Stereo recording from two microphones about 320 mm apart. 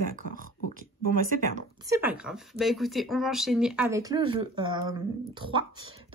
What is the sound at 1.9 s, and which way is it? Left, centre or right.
Speech, centre.